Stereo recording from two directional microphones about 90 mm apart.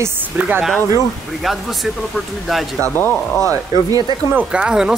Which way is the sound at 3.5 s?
40° right (ahead or behind).